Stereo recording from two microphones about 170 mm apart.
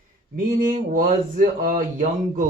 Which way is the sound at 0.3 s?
55° right (ahead or behind).